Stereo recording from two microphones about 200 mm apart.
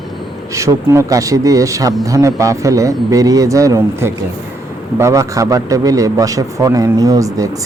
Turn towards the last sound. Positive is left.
turn(degrees=-15)  # may be behind; listen again after turning